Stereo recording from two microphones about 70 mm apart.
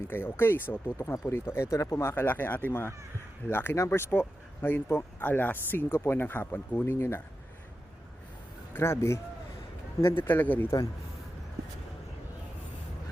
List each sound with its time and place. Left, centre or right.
0.1 s speech: left
0.9 s speech: left
2.1 s speech: left
8.7 s speech: left